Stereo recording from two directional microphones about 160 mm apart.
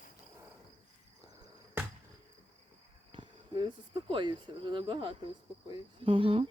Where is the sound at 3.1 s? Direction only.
30° right (ahead or behind).